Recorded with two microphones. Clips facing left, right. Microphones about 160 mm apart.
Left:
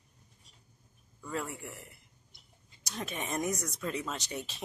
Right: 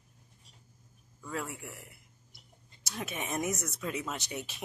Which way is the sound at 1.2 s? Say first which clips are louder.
Left 1 dB; centre (ahead or behind).